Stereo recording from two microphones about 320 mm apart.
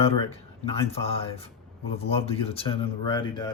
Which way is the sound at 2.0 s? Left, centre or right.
Centre.